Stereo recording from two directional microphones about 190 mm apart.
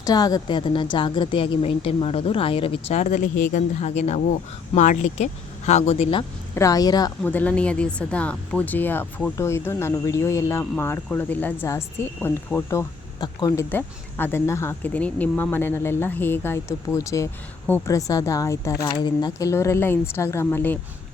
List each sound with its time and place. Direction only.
0.0 s speech: 20° left (ahead or behind)
6.5 s speech: 15° left (ahead or behind)
7.3 s speech: 10° left (ahead or behind)
13.1 s speech: 20° left (ahead or behind)
13.7 s speech: 10° left (ahead or behind)